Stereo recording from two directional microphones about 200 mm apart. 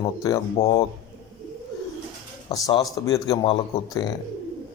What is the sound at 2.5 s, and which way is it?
Speech, 20° left (ahead or behind).